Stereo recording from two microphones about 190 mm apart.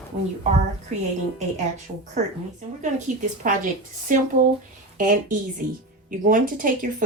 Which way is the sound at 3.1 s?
40° right (ahead or behind).